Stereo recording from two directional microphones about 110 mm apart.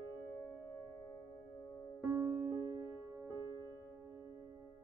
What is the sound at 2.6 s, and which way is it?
Music, 35° right (ahead or behind).